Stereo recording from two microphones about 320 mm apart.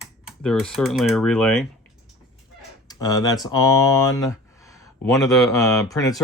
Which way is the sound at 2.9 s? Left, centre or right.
Centre.